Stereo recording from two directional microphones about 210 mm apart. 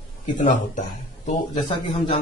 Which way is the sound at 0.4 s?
35° left (ahead or behind).